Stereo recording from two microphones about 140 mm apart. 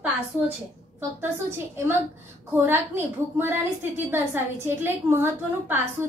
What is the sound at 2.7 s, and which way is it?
A woman's voice, 15° right (ahead or behind).